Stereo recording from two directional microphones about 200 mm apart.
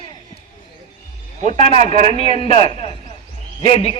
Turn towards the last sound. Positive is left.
turn(degrees=30)  # may be behind; listen again after turning